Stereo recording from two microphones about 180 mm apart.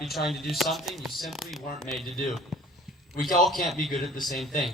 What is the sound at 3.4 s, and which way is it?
Speech, centre (ahead or behind).